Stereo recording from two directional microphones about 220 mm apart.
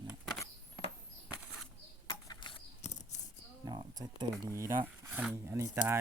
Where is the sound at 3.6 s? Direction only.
15° right (ahead or behind).